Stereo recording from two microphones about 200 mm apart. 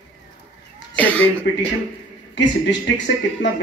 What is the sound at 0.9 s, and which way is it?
Speech, 10° left (ahead or behind).